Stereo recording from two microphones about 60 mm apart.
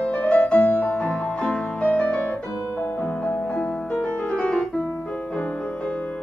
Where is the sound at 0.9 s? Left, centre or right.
Centre.